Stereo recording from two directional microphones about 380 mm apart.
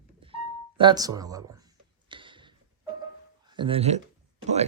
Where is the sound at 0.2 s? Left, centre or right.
Centre.